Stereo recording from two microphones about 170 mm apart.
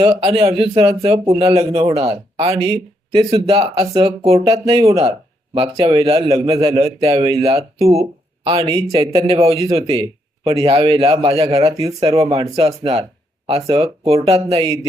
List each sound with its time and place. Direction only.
0.0 s a man's voice: 35° right (ahead or behind)